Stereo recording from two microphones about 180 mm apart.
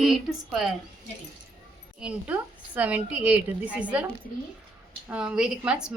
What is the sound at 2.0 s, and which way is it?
A woman's voice, 5° right (ahead or behind).